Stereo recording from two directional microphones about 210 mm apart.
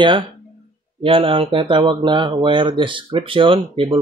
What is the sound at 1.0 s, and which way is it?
Speech, 25° right (ahead or behind).